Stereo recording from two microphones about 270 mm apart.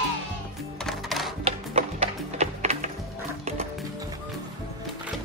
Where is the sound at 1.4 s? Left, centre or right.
Right.